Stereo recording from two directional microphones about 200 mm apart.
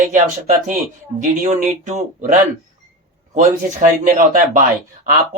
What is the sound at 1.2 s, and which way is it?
Speech, 40° right (ahead or behind).